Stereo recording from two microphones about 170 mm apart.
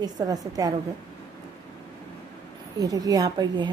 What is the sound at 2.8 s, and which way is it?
Speech, 20° right (ahead or behind).